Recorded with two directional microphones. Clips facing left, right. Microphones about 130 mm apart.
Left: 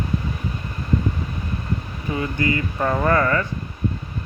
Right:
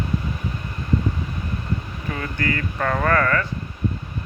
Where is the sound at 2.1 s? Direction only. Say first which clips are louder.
Left 3 dB; 15° left (ahead or behind).